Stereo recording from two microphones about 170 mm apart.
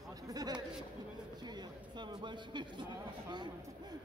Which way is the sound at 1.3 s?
25° right (ahead or behind).